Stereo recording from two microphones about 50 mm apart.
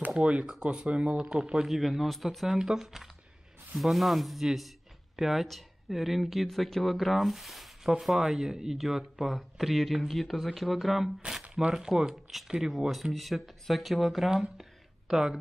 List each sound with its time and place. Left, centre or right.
0.2 s speech: right
1.6 s speech: centre
14.6 s a sound: centre